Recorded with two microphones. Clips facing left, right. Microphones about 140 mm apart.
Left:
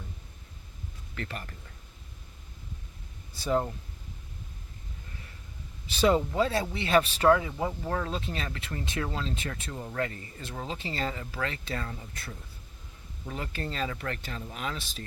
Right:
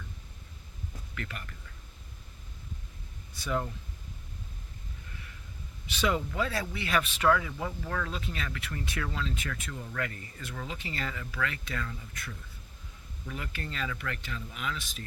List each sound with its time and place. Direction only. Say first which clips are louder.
1.1 s speech: left 4 dB; 35° left (ahead or behind)
3.3 s speech: left 5 dB; 30° left (ahead or behind)
5.9 s speech: left 6 dB; 35° left (ahead or behind)